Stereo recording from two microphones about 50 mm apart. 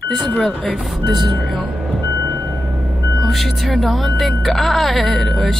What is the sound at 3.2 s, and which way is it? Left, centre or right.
Speech, centre.